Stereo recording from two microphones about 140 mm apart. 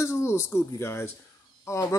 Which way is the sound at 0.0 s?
20° left (ahead or behind).